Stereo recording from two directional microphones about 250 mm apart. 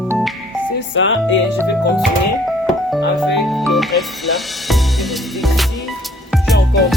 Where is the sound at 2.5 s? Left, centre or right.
Centre.